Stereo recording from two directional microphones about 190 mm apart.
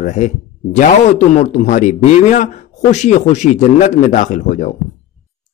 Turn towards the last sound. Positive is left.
turn(degrees=40)  # may be behind; listen again after turning